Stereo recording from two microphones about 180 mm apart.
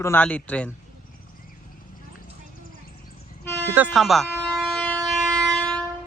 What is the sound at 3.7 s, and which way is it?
Speech, 5° right (ahead or behind).